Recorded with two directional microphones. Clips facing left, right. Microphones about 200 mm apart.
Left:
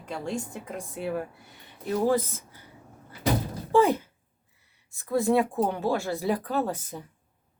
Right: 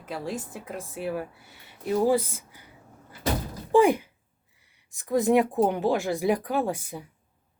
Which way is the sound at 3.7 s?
15° right (ahead or behind).